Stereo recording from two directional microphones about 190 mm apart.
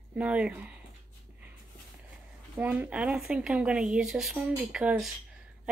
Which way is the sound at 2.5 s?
5° right (ahead or behind).